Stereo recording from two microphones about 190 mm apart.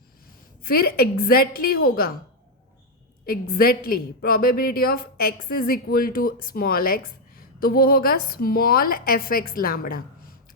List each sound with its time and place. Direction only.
0.6 s a woman's voice: 50° left (ahead or behind)
3.2 s a woman's voice: 50° left (ahead or behind)